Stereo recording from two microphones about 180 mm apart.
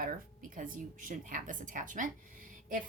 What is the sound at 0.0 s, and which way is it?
A woman's voice, 50° right (ahead or behind).